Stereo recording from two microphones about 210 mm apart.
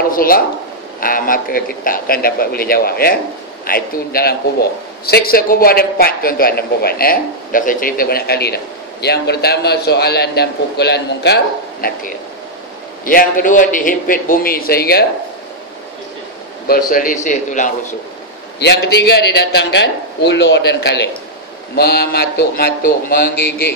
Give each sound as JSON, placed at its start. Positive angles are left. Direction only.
{"t": 0.1, "sound": "a man's voice", "side_deg": 45}
{"t": 16.6, "sound": "a man's voice", "side_deg": 45}
{"t": 18.6, "sound": "a man's voice", "side_deg": 55}